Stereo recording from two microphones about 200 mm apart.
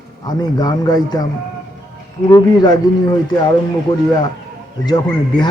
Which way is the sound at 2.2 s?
20° left (ahead or behind).